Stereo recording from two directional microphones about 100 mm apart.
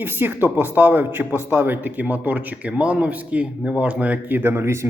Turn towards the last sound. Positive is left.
turn(degrees=-25)  # may be behind; listen again after turning